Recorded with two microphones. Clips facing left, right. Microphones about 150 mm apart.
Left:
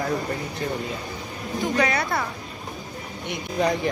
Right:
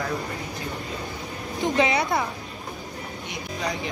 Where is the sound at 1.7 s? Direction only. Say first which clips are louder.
Right 2 dB; 20° right (ahead or behind).